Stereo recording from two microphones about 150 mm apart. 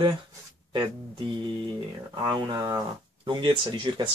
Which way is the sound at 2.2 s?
30° right (ahead or behind).